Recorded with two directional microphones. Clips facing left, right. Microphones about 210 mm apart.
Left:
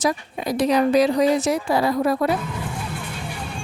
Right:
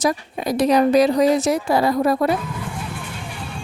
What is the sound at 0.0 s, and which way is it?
Speech, 40° right (ahead or behind).